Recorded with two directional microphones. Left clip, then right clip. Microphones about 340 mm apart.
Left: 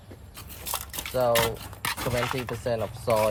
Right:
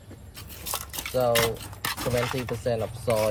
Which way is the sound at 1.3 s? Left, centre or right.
Centre.